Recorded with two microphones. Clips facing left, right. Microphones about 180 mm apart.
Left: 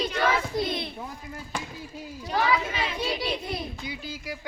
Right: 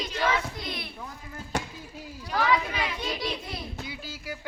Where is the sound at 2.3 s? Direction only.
25° left (ahead or behind).